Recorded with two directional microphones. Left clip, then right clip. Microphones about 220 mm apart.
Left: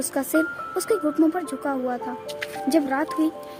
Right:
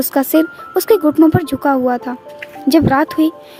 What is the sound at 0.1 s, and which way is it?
Speech, 45° right (ahead or behind).